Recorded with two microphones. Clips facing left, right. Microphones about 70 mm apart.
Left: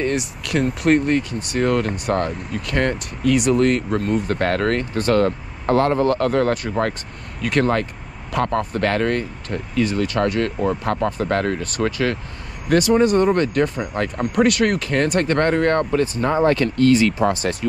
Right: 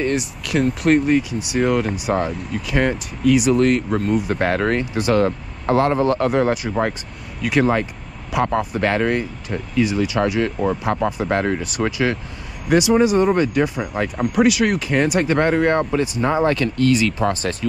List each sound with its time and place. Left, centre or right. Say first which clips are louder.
0.0 s speech: right 1 dB; centre
4.4 s speech: right 1 dB; right
6.3 s speech: right 1 dB; centre
11.2 s speech: right 1 dB; right
12.6 s speech: even; centre
16.4 s speech: left 2 dB; left